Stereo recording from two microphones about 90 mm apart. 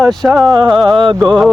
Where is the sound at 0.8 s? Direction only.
65° right (ahead or behind).